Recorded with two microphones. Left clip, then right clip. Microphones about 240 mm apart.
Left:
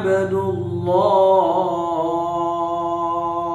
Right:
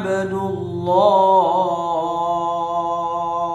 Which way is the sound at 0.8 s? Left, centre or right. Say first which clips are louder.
Right 1 dB; centre.